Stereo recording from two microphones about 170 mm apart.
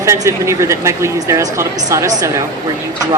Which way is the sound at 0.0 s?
15° right (ahead or behind).